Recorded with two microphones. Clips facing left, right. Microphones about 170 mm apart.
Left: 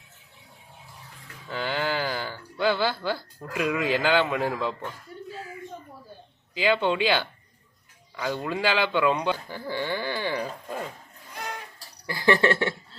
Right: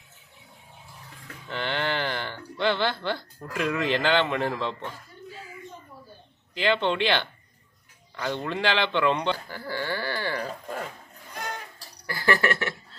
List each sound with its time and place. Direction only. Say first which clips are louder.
1.5 s speech: left 1 dB; 5° left (ahead or behind)
6.5 s a man's voice: left 1 dB; 5° left (ahead or behind)
9.5 s a man's voice: left 1 dB; 20° left (ahead or behind)
12.0 s a sound: left 3 dB; 20° left (ahead or behind)